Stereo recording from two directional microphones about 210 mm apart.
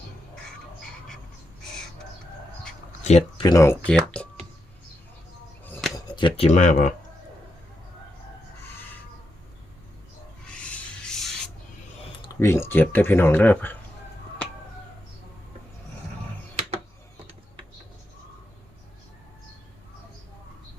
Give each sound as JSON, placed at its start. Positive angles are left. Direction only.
{"t": 3.0, "sound": "a sound", "side_deg": 30}
{"t": 3.4, "sound": "speech", "side_deg": 15}
{"t": 5.7, "sound": "a sound", "side_deg": 0}
{"t": 6.1, "sound": "speech", "side_deg": 25}
{"t": 10.4, "sound": "rub", "side_deg": 5}
{"t": 12.3, "sound": "speech", "side_deg": 15}